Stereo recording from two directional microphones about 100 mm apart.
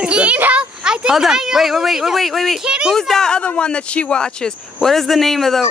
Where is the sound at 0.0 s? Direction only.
10° right (ahead or behind).